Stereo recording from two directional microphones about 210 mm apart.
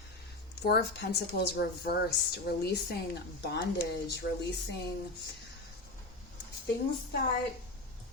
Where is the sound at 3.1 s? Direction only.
50° left (ahead or behind).